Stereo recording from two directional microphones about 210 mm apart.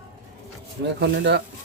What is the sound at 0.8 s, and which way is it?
Speech, 55° right (ahead or behind).